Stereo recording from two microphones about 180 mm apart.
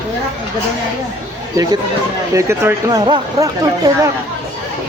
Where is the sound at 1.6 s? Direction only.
20° right (ahead or behind).